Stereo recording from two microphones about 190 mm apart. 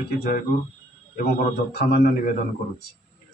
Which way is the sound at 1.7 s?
55° left (ahead or behind).